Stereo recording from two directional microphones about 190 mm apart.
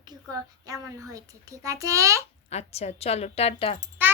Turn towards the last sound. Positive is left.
turn(degrees=-10)  # may be behind; listen again after turning